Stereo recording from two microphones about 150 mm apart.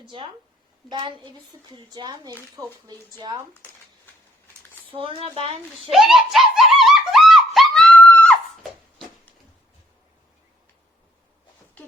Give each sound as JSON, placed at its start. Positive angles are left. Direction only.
{"t": 0.0, "sound": "a woman's voice", "side_deg": -35}
{"t": 4.9, "sound": "a woman's voice", "side_deg": -35}
{"t": 5.9, "sound": "a sound", "side_deg": 0}